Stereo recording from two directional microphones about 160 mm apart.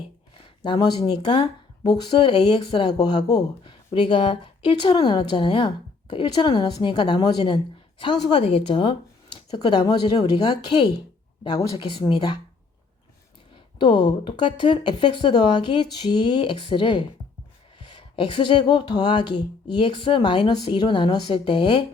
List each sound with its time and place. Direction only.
0.6 s speech: 25° left (ahead or behind)
13.7 s speech: 30° left (ahead or behind)